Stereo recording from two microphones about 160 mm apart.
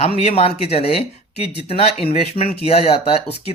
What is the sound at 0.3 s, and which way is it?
Speech, 40° left (ahead or behind).